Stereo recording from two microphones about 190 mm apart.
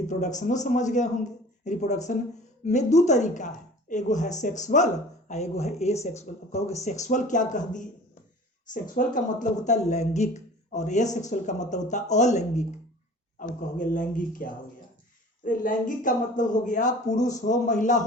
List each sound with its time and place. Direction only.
0.1 s speech: 40° left (ahead or behind)
17.2 s speech: 20° left (ahead or behind)
17.4 s speech: 40° left (ahead or behind)